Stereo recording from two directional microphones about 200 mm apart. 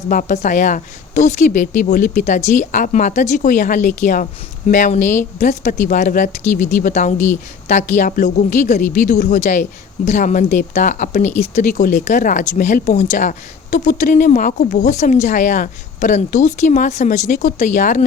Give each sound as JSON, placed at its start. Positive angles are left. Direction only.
{"t": 0.1, "sound": "speech", "side_deg": 40}